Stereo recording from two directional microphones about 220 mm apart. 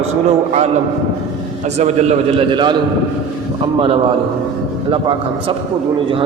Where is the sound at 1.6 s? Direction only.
30° right (ahead or behind).